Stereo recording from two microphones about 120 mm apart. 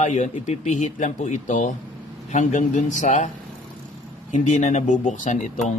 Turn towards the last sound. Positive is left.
turn(degrees=90)